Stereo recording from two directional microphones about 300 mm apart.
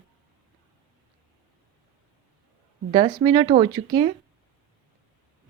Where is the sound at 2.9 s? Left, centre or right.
Centre.